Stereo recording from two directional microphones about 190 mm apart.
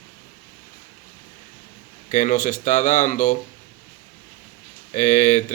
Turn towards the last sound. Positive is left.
turn(degrees=40)  # may be behind; listen again after turning